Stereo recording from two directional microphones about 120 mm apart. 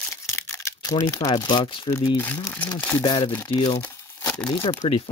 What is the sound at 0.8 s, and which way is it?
Speech, 35° left (ahead or behind).